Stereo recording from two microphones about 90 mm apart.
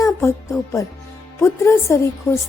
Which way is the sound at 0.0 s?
30° left (ahead or behind).